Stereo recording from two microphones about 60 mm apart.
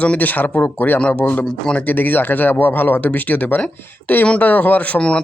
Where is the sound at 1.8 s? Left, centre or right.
Left.